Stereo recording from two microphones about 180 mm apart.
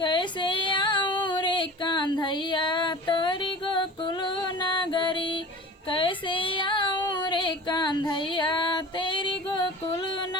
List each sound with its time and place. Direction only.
0.0 s female singing: 25° left (ahead or behind)
5.9 s child singing: 30° left (ahead or behind)